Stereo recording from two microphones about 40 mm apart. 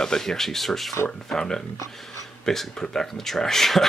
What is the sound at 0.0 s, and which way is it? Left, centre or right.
Speech, centre.